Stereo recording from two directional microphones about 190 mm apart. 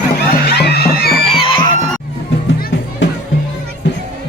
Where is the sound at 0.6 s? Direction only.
55° left (ahead or behind).